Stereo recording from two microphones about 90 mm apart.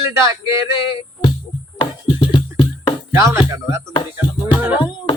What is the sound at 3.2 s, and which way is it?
Speech, 35° right (ahead or behind).